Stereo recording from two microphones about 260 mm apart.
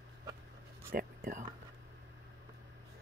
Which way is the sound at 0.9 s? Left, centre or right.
Right.